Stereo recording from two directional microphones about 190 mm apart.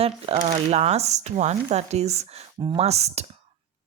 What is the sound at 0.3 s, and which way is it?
A woman's voice, 35° right (ahead or behind).